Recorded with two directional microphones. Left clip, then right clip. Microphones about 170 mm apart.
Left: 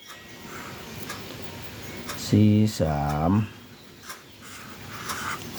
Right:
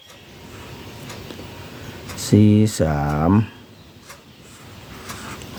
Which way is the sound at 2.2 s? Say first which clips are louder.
Right 6 dB; 50° right (ahead or behind).